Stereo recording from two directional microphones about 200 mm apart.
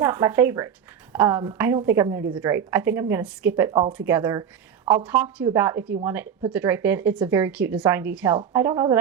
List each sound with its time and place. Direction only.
0.0 s a woman's voice: 10° right (ahead or behind)
3.7 s speech: 25° right (ahead or behind)
3.9 s a woman's voice: 10° right (ahead or behind)